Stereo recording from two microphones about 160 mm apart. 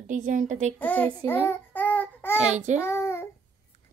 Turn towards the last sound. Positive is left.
turn(degrees=15)  # may be behind; listen again after turning